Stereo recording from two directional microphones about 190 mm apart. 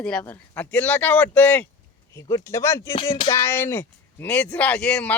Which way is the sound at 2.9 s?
25° left (ahead or behind).